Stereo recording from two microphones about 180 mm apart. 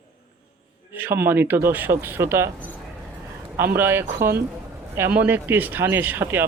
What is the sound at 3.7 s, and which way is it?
Speech, 10° right (ahead or behind).